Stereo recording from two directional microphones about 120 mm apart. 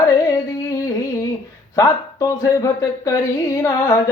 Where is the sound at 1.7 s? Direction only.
25° left (ahead or behind).